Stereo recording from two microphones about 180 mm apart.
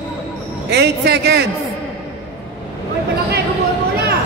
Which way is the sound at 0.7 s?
70° right (ahead or behind).